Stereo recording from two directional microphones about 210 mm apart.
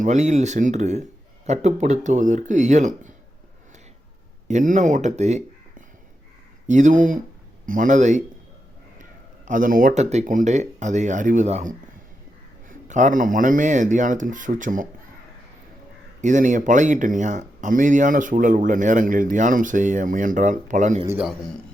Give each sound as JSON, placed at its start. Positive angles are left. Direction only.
{"t": 0.0, "sound": "speech", "side_deg": -35}
{"t": 4.4, "sound": "speech", "side_deg": -35}
{"t": 9.5, "sound": "speech", "side_deg": -40}
{"t": 16.2, "sound": "speech", "side_deg": -35}
{"t": 21.1, "sound": "a man's voice", "side_deg": -5}